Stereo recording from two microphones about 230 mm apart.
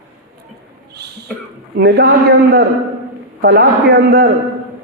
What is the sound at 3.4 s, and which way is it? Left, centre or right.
Speech, right.